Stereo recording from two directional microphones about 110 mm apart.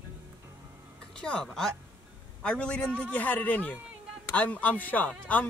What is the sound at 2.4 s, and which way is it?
Speech, 10° left (ahead or behind).